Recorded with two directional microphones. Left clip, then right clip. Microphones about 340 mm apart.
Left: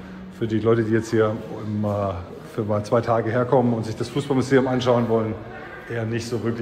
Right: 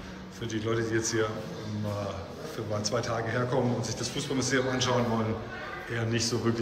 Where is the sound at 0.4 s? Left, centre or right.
Centre.